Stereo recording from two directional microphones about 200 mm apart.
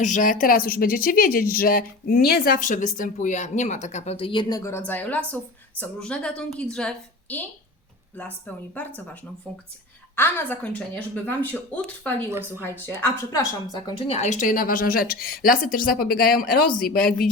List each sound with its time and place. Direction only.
0.0 s a woman's voice: 40° left (ahead or behind); by 12.1 s 10° left (ahead or behind)
12.3 s speech: 10° right (ahead or behind)
12.6 s a woman's voice: 10° left (ahead or behind)
14.1 s a woman's voice: 35° left (ahead or behind)